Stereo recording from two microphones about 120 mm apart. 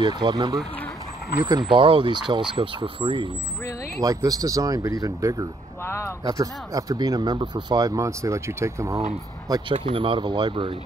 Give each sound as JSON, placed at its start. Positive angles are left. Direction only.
{"t": 0.0, "sound": "speech", "side_deg": -40}
{"t": 4.0, "sound": "speech", "side_deg": -30}
{"t": 9.7, "sound": "speech", "side_deg": -45}